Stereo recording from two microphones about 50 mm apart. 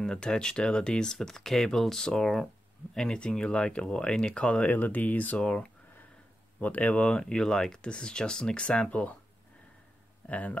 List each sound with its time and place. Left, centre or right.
0.0 s speech: centre
4.6 s speech: left
5.4 s speech: centre
6.6 s speech: left
7.0 s speech: centre
10.2 s speech: left